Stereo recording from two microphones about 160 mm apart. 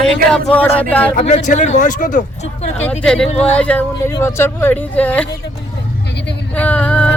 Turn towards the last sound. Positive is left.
turn(degrees=10)  # may be behind; listen again after turning